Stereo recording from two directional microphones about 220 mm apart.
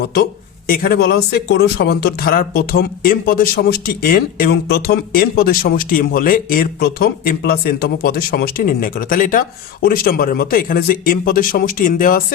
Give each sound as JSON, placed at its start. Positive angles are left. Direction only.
{"t": 0.0, "sound": "speech", "side_deg": 45}